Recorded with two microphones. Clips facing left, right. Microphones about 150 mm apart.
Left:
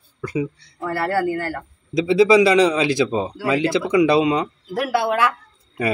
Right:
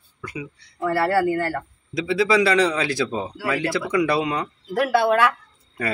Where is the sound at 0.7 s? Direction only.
5° right (ahead or behind).